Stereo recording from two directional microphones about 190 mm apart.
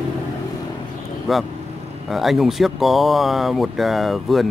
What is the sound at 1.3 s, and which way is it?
Speech, centre (ahead or behind).